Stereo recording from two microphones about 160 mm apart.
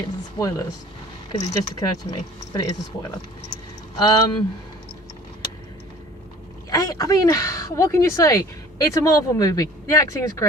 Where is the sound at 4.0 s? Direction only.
25° left (ahead or behind).